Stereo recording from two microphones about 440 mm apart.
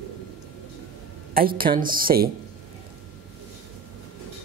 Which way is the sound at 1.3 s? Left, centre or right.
Centre.